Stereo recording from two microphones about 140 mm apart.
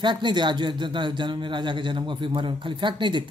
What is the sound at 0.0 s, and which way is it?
Speech, 35° right (ahead or behind).